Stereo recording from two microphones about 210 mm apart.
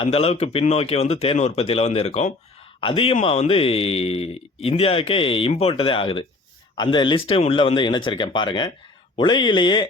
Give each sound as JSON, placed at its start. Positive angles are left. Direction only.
{"t": 0.0, "sound": "speech", "side_deg": 30}